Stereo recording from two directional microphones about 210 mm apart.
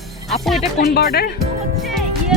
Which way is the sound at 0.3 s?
Centre (ahead or behind).